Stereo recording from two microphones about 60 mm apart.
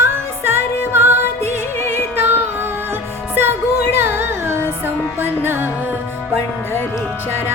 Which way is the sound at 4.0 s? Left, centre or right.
Right.